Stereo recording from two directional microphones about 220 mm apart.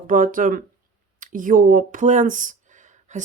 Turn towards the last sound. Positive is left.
turn(degrees=-35)  # may be behind; listen again after turning